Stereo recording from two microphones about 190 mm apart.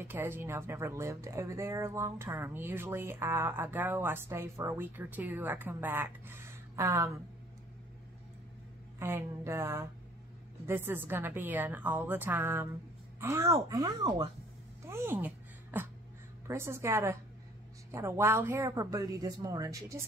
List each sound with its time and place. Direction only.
0.1 s speech: 10° right (ahead or behind)
9.0 s speech: 15° right (ahead or behind)
14.9 s a sound: 10° right (ahead or behind)
16.4 s speech: 15° right (ahead or behind)